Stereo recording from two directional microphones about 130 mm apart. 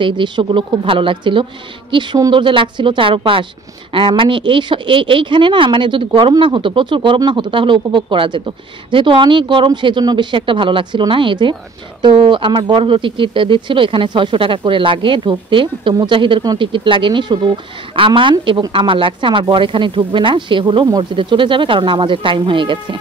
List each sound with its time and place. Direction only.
0.0 s speech: 40° right (ahead or behind)